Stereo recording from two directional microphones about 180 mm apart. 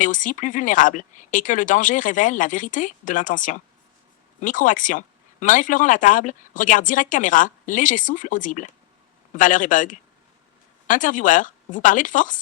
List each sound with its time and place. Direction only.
0.0 s speech: 45° left (ahead or behind)